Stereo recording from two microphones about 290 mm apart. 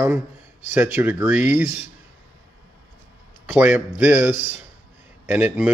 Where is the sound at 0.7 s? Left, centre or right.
Centre.